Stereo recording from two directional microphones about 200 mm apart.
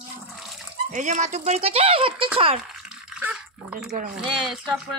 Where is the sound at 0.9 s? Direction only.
40° right (ahead or behind).